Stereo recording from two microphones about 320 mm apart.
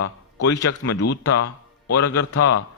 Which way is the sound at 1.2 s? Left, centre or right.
Left.